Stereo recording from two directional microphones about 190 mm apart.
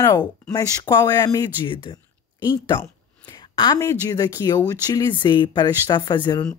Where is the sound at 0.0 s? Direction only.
15° left (ahead or behind).